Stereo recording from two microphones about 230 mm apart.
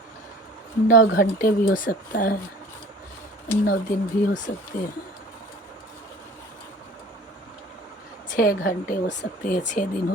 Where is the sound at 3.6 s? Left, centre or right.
Left.